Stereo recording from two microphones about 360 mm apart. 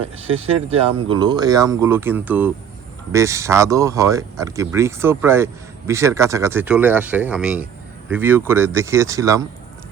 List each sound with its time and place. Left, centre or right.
0.3 s speech: centre